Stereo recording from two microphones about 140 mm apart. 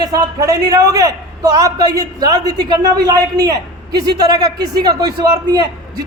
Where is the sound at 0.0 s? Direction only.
25° right (ahead or behind).